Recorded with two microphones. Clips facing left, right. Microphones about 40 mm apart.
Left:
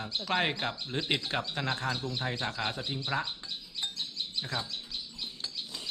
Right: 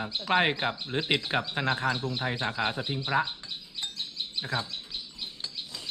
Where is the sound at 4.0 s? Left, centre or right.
Centre.